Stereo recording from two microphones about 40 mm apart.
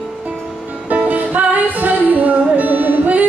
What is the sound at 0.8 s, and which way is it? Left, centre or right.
Music, right.